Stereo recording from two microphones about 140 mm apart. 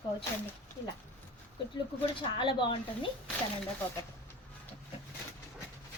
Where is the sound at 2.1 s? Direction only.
35° left (ahead or behind).